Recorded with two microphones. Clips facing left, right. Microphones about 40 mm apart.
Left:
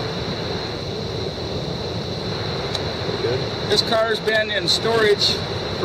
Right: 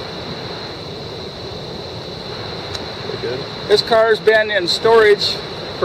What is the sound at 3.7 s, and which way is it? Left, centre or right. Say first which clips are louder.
Speech: right 7 dB; centre.